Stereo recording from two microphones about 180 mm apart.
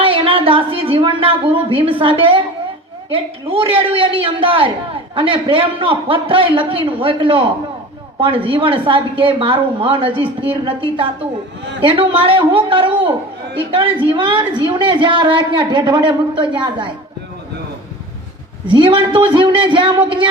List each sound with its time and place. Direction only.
0.0 s a woman's voice: 30° right (ahead or behind)
18.7 s a woman's voice: 30° right (ahead or behind)